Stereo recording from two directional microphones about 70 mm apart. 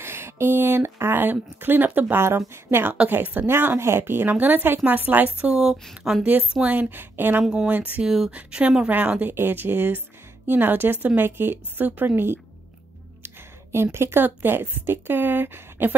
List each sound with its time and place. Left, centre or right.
0.0 s a woman's voice: right; by 6.2 s centre
6.6 s a woman's voice: right
7.4 s speech: centre
7.7 s a woman's voice: right
8.0 s speech: centre
8.3 s speech: centre
9.3 s a woman's voice: right
13.2 s a sound: right
13.9 s a woman's voice: right